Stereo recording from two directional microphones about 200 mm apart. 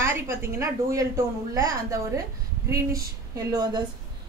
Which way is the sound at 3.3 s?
20° right (ahead or behind).